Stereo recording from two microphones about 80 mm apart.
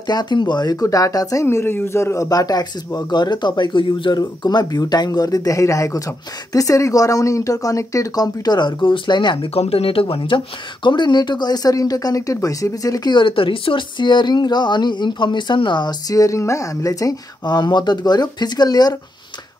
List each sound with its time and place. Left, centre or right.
0.0 s speech: left
4.2 s speech: left
8.5 s speech: left
10.1 s speech: left
13.1 s speech: left